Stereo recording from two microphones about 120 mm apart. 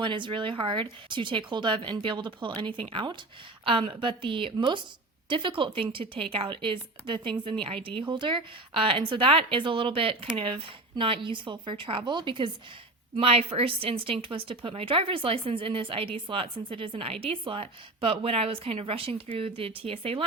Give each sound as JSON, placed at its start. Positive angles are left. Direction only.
{"t": 0.0, "sound": "a woman's voice", "side_deg": -40}